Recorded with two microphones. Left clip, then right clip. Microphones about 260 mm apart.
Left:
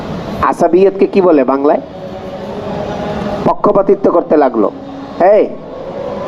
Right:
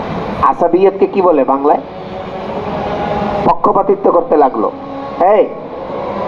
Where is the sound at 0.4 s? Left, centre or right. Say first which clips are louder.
Left 1 dB; left.